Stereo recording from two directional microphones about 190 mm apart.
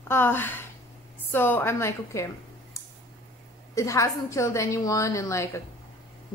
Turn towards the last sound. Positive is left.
turn(degrees=15)  # may be behind; listen again after turning